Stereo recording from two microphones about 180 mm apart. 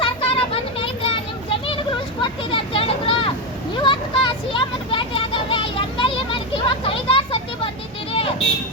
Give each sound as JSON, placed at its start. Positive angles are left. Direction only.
{"t": 0.0, "sound": "children playing", "side_deg": 30}
{"t": 2.2, "sound": "a sound", "side_deg": 30}
{"t": 3.8, "sound": "children playing", "side_deg": 25}